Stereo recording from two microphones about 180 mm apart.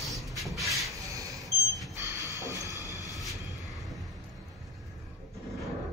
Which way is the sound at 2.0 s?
20° right (ahead or behind).